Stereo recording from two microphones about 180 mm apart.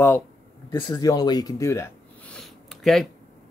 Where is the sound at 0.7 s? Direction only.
25° left (ahead or behind).